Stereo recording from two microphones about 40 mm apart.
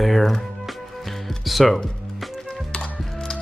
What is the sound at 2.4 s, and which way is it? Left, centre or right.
Music, centre.